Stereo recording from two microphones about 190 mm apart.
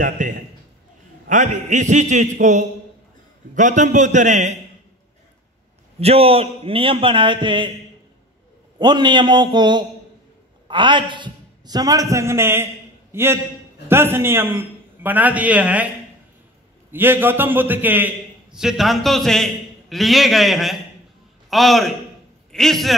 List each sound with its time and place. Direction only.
0.0 s a sound: 45° right (ahead or behind)
1.3 s a man's voice: 40° right (ahead or behind)
3.5 s a man's voice: 40° right (ahead or behind)
5.9 s a man's voice: 30° right (ahead or behind)
8.7 s a man's voice: 25° right (ahead or behind); by 15.9 s 10° right (ahead or behind)
16.9 s a man's voice: 10° right (ahead or behind)